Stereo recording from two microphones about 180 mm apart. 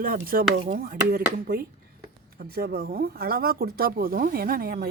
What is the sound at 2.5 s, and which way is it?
Speech, 60° right (ahead or behind).